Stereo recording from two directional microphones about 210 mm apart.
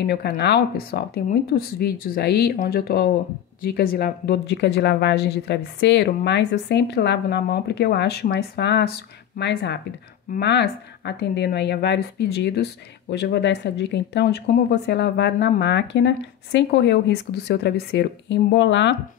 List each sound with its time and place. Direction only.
0.0 s speech: 50° left (ahead or behind)